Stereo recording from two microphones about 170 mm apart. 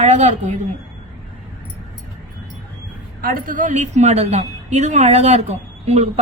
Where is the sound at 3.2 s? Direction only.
55° right (ahead or behind).